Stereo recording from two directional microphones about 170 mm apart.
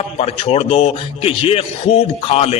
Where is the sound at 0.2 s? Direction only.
35° left (ahead or behind).